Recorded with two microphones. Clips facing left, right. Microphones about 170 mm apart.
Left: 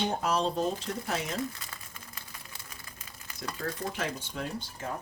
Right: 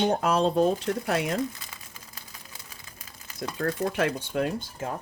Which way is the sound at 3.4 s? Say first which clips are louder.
Right 7 dB; 55° right (ahead or behind).